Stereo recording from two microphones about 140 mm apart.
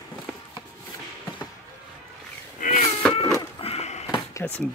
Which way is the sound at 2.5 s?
70° left (ahead or behind).